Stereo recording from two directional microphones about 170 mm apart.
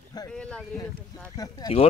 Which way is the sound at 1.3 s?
20° left (ahead or behind).